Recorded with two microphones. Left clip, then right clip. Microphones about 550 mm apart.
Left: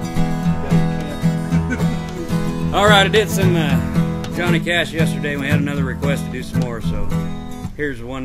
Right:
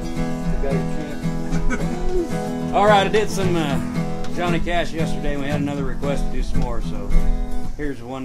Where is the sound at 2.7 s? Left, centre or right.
Left.